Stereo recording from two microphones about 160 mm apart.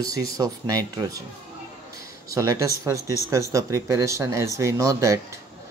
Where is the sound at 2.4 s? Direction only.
20° right (ahead or behind).